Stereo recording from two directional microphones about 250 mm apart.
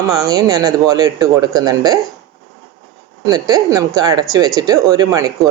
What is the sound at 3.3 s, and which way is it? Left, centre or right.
Speech, centre.